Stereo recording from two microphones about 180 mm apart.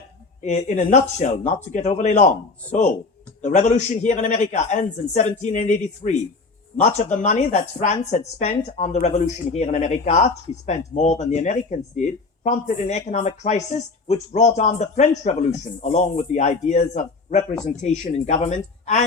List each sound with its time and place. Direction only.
0.4 s speech: 40° left (ahead or behind)
3.4 s speech: 40° left (ahead or behind)
6.8 s a woman's voice: 40° left (ahead or behind)